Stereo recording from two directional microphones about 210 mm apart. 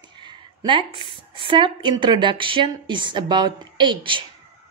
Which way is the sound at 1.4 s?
25° right (ahead or behind).